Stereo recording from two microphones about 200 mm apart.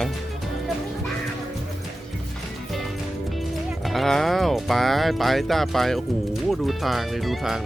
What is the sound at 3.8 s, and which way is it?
Speech, centre (ahead or behind).